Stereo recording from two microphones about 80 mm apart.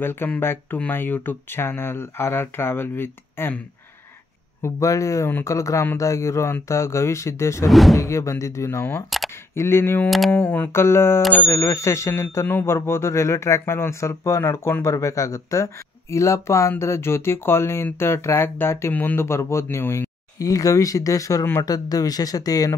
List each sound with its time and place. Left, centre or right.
0.0 s speech: left
4.6 s speech: left
7.6 s speech: centre
8.0 s speech: left
9.1 s single-lens reflex camera: centre
9.5 s speech: left
10.0 s speech: centre
10.3 s speech: left
20.3 s speech: left